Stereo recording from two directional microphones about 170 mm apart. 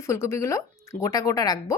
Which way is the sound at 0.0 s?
15° left (ahead or behind).